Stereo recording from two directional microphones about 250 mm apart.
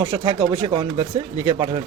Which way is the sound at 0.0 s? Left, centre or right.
Right.